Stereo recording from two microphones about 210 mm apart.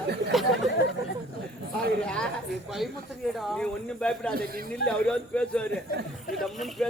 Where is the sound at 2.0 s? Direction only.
5° left (ahead or behind).